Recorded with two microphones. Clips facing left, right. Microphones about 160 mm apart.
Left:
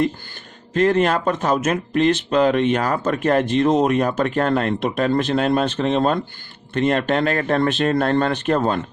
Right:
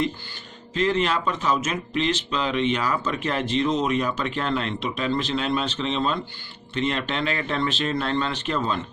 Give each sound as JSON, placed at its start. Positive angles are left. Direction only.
{"t": 0.7, "sound": "speech", "side_deg": 50}